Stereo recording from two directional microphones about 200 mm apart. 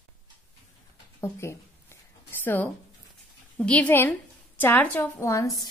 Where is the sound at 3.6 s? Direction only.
5° left (ahead or behind).